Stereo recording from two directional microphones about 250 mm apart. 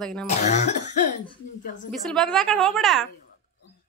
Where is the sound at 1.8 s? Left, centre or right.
Centre.